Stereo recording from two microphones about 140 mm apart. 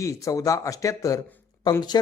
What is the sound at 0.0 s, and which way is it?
Speech, 25° left (ahead or behind).